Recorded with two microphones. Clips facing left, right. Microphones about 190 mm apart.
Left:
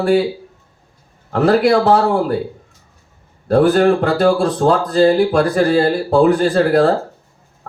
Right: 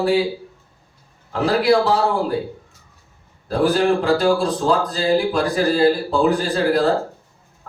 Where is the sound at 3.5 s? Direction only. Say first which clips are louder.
Left 5 dB; 55° left (ahead or behind).